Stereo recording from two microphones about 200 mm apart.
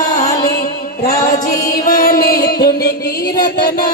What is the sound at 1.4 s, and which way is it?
Music, 45° left (ahead or behind).